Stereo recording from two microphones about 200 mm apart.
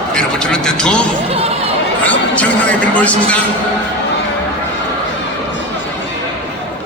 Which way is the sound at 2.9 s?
5° left (ahead or behind).